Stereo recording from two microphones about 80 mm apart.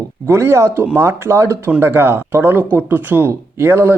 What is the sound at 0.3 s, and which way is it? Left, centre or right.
Speech, right.